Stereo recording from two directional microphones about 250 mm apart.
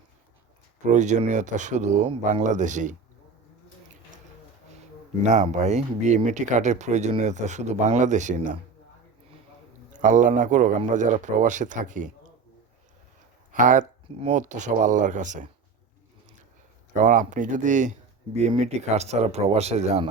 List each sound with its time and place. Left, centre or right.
0.8 s speech: right
5.2 s speech: right
10.0 s speech: right
13.5 s speech: right
16.9 s speech: right